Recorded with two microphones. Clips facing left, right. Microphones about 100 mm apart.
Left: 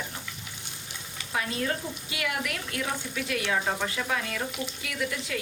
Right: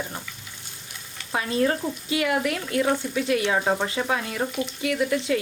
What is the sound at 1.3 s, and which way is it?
Speech, 35° right (ahead or behind).